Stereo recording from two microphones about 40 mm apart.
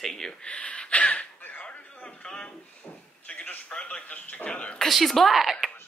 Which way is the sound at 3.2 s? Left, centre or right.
Left.